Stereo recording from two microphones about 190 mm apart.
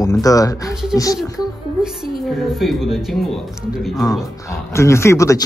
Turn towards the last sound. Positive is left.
turn(degrees=15)  # may be behind; listen again after turning